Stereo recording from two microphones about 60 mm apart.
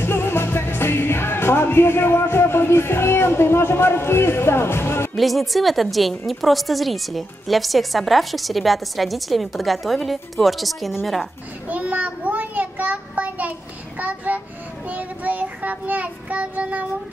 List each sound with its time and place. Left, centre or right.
0.0 s music: left
5.1 s a woman's voice: centre
11.7 s child singing: right